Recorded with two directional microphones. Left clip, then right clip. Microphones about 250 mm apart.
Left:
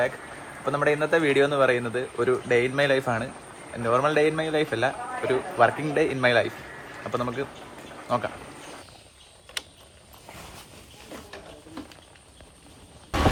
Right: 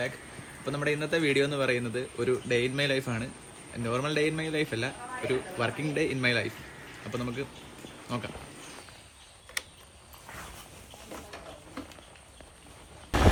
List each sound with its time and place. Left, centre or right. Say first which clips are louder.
0.6 s a man's voice: left 7 dB; centre